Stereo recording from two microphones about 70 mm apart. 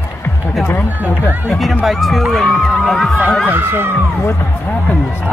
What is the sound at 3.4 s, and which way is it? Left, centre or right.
Speech, right.